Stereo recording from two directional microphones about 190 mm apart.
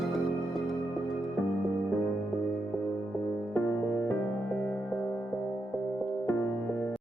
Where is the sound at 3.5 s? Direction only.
10° left (ahead or behind).